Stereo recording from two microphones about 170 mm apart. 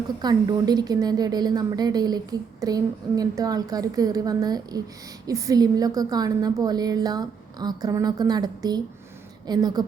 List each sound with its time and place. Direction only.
0.2 s a woman's voice: 25° right (ahead or behind)